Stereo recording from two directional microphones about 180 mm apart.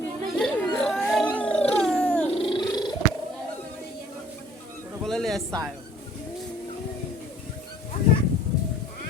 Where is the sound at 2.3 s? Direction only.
30° left (ahead or behind).